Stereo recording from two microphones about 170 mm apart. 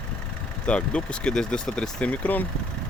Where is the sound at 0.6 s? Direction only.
5° left (ahead or behind).